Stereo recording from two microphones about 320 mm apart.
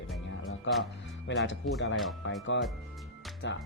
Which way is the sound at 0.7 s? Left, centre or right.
Left.